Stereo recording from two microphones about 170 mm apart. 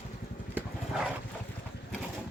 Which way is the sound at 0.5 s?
5° right (ahead or behind).